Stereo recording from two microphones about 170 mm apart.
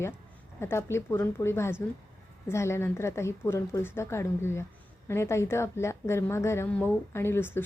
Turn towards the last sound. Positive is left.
turn(degrees=15)  # may be behind; listen again after turning